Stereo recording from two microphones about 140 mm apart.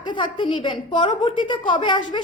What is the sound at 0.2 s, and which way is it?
A woman's voice, 35° left (ahead or behind).